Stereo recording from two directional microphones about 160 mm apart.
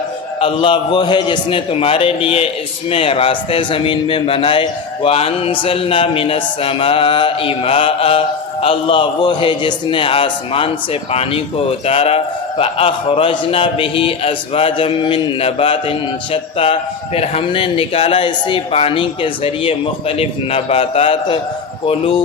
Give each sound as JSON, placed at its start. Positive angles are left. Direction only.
{"t": 0.3, "sound": "a man's voice", "side_deg": 35}